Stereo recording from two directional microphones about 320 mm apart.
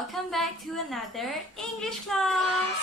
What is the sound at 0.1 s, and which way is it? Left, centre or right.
A woman's voice, centre.